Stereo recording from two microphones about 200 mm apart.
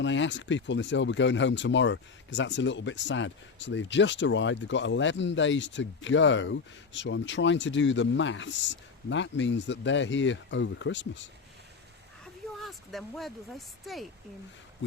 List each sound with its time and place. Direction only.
0.0 s speech: 65° left (ahead or behind)
12.2 s a woman's voice: centre (ahead or behind)